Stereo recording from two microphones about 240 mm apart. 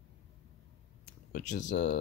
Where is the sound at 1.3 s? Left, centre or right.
Left.